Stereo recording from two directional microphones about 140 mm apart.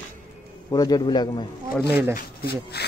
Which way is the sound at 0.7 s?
25° left (ahead or behind).